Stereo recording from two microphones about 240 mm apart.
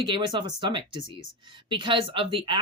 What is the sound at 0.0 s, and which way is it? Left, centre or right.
Speech, right.